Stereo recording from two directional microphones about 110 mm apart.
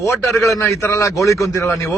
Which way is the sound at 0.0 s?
25° left (ahead or behind).